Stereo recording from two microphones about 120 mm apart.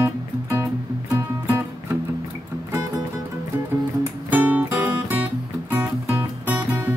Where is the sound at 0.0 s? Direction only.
20° right (ahead or behind).